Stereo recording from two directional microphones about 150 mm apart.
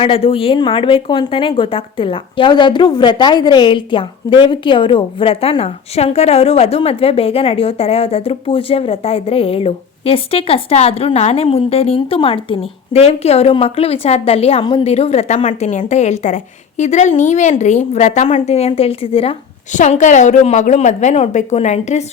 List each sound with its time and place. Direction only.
0.0 s a woman's voice: 40° left (ahead or behind)
19.7 s a woman's voice: 55° left (ahead or behind)